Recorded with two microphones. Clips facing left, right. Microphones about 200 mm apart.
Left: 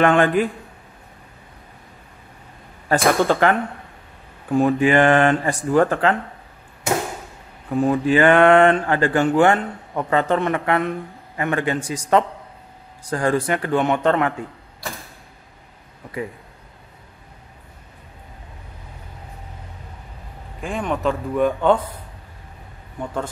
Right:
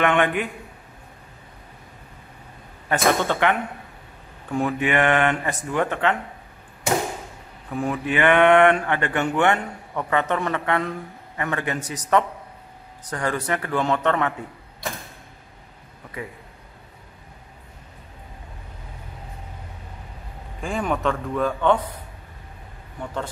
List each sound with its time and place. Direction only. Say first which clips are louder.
0.0 s speech: left 5 dB; 35° left (ahead or behind)
2.9 s speech: left 4 dB; 35° left (ahead or behind)
4.6 s speech: left 5 dB; 30° left (ahead or behind)
7.8 s a man's voice: left 5 dB; 30° left (ahead or behind)
20.6 s a man's voice: left 1 dB; centre (ahead or behind)
21.1 s speech: left 4 dB; 15° left (ahead or behind)